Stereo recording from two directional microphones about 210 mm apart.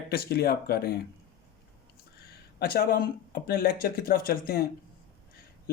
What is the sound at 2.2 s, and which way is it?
Speech, 45° left (ahead or behind).